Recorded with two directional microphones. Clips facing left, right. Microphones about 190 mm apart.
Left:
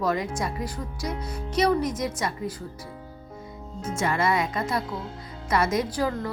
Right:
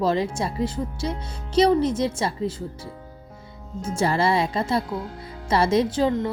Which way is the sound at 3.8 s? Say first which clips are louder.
Right 3 dB; 30° right (ahead or behind).